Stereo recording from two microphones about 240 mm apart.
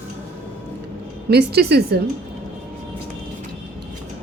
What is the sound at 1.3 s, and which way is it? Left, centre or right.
Speech, right.